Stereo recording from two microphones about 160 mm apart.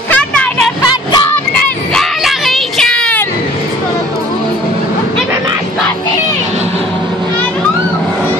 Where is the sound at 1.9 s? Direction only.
Centre (ahead or behind).